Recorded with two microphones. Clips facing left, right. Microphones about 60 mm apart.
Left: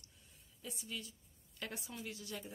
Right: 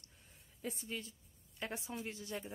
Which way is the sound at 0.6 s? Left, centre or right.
Right.